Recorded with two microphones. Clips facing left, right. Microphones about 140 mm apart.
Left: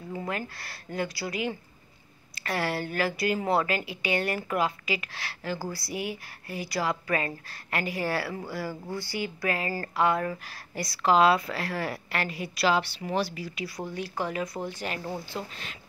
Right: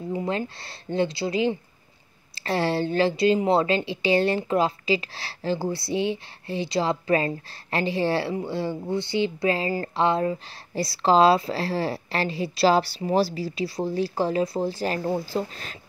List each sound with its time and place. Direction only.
0.1 s a woman's voice: 20° right (ahead or behind)